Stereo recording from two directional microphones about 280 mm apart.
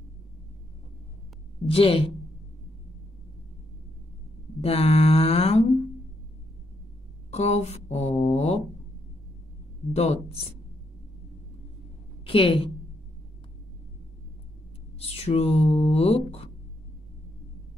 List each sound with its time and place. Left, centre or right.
1.7 s mantra: centre
4.6 s mantra: left
7.2 s speech: left
7.7 s mantra: left
9.9 s mantra: left
12.3 s a woman's voice: centre
15.0 s speech: left